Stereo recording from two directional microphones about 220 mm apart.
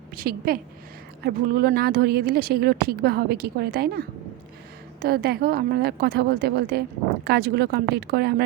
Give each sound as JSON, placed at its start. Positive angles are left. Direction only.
{"t": 0.2, "sound": "a woman's voice", "side_deg": -40}